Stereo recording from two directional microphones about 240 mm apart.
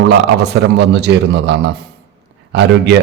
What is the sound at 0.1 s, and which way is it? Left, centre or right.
A man's voice, right.